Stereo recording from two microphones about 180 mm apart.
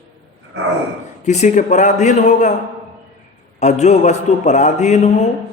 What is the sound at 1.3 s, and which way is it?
A man's voice, 40° left (ahead or behind).